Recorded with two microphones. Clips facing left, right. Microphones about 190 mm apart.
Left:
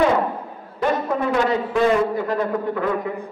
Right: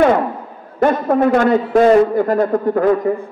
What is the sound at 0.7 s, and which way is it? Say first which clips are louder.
A man's voice: right 7 dB; 50° right (ahead or behind).